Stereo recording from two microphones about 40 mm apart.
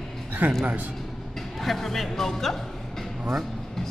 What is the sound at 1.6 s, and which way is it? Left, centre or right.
Speech, centre.